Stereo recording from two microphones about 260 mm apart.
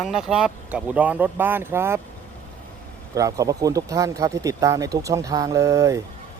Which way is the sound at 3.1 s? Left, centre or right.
Centre.